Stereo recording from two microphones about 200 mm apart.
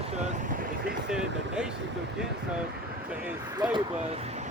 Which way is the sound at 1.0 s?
5° right (ahead or behind).